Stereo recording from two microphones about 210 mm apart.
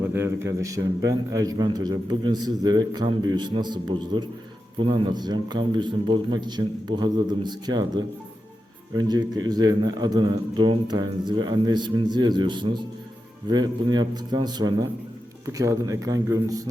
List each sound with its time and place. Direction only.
0.4 s a man's voice: 15° right (ahead or behind)